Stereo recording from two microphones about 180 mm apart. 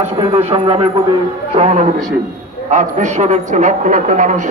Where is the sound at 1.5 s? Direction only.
35° right (ahead or behind).